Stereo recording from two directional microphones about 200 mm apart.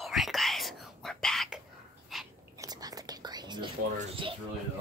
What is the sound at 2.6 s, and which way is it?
Whispering, 20° right (ahead or behind).